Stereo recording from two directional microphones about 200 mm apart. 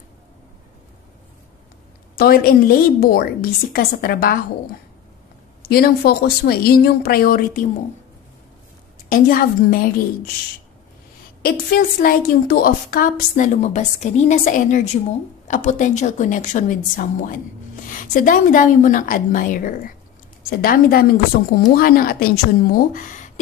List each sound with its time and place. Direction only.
2.1 s a woman's voice: 50° left (ahead or behind)
5.6 s a woman's voice: 50° left (ahead or behind)
9.1 s a woman's voice: 45° left (ahead or behind)
11.4 s a woman's voice: 50° left (ahead or behind)